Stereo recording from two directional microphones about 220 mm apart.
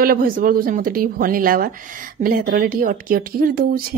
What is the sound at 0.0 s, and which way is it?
A woman's voice, 40° right (ahead or behind).